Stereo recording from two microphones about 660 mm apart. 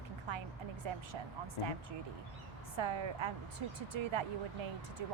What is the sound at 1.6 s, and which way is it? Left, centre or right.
Speech, left.